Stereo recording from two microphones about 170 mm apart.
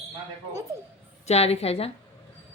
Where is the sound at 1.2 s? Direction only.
40° left (ahead or behind).